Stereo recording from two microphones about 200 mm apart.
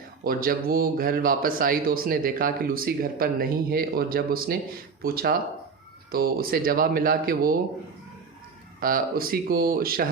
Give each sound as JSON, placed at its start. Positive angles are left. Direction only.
{"t": 0.3, "sound": "speech", "side_deg": -45}
{"t": 8.8, "sound": "speech", "side_deg": -45}